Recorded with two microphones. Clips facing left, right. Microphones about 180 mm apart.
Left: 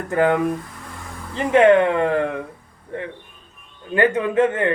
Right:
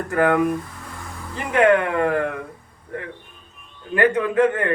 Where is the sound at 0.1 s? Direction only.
25° left (ahead or behind).